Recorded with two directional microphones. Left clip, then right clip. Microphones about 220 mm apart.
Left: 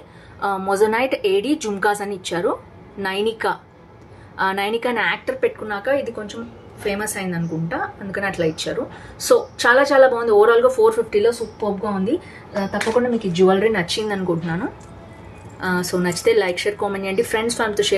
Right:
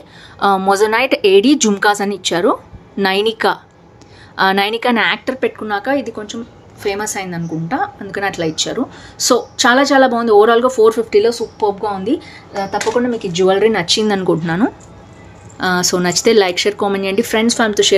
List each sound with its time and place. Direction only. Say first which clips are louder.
0.4 s a woman's voice: right 6 dB; 45° right (ahead or behind)
13.3 s a woman's voice: right 4 dB; 50° right (ahead or behind)